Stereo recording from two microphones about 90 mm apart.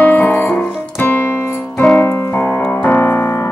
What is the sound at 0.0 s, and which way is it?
Music, 20° left (ahead or behind).